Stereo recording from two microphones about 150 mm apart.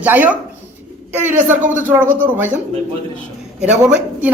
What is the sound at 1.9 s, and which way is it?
Speech, 15° right (ahead or behind).